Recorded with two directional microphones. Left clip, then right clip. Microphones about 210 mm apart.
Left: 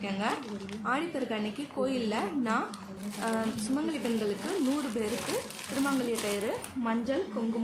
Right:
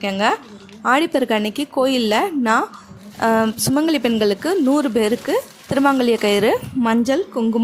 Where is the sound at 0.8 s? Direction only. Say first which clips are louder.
Right 15 dB; 45° right (ahead or behind).